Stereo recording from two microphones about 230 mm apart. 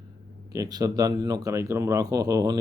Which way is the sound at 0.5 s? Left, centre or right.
Centre.